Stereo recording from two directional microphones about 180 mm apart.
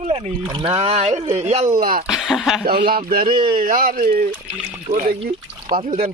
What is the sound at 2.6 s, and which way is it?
Speech, 55° right (ahead or behind).